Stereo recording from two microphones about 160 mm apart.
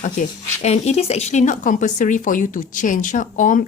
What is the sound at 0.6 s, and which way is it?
A woman's voice, 45° left (ahead or behind).